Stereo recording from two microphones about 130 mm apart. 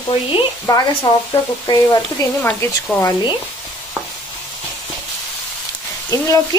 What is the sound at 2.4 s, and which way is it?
Speech, 15° left (ahead or behind).